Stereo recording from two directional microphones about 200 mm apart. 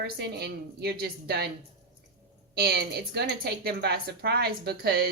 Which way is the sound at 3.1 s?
55° right (ahead or behind).